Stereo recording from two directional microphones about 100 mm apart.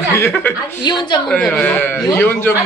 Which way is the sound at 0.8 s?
45° left (ahead or behind).